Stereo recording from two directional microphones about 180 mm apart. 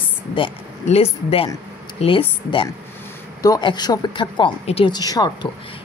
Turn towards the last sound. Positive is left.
turn(degrees=20)  # may be behind; listen again after turning